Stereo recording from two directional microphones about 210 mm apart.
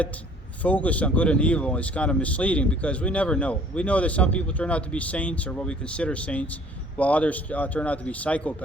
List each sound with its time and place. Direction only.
0.6 s a man's voice: 5° left (ahead or behind)